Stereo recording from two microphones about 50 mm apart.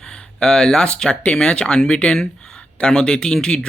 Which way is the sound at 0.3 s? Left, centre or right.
Centre.